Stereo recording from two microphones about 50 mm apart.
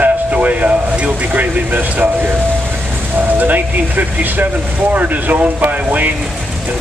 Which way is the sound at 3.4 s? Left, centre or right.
Right.